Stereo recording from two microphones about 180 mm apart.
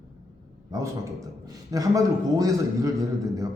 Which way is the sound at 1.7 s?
20° right (ahead or behind).